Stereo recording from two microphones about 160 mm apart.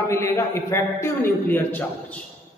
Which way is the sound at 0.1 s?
20° left (ahead or behind).